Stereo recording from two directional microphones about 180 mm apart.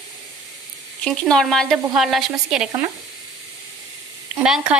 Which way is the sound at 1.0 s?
5° left (ahead or behind).